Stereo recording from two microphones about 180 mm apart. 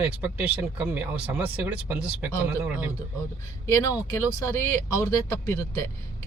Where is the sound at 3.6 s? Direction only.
15° left (ahead or behind).